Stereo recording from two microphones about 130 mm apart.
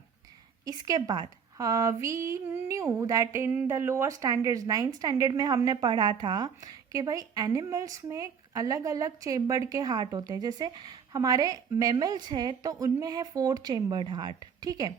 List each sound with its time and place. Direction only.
0.6 s a woman's voice: 30° right (ahead or behind)